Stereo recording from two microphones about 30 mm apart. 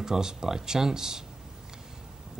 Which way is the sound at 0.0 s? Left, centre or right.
Centre.